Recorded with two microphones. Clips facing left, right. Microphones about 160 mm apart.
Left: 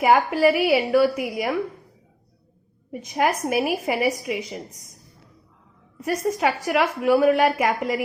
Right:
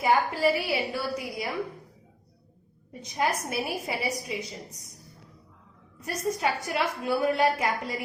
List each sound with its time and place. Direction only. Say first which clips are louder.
0.0 s a woman's voice: left 6 dB; 80° left
2.9 s a woman's voice: left 6 dB; 75° left (ahead or behind)
6.1 s a woman's voice: left 6 dB; 75° left (ahead or behind)